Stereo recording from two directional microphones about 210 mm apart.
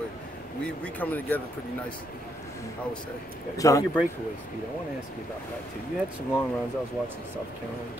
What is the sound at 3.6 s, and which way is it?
Speech, 15° left (ahead or behind).